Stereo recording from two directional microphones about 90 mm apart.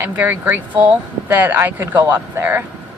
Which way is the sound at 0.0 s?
20° right (ahead or behind).